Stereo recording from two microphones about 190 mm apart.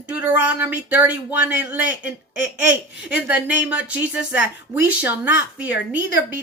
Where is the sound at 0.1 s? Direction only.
5° right (ahead or behind).